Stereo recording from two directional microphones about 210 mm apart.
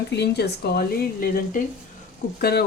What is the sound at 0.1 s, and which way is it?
Speech, 50° left (ahead or behind).